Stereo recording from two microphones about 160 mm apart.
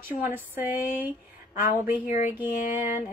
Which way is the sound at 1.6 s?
55° left (ahead or behind).